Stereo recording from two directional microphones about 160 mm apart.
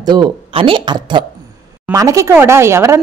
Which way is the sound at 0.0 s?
30° right (ahead or behind).